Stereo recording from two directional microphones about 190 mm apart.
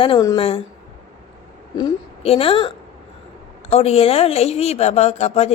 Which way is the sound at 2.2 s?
30° left (ahead or behind).